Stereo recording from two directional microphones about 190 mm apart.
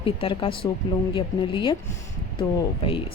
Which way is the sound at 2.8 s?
30° left (ahead or behind).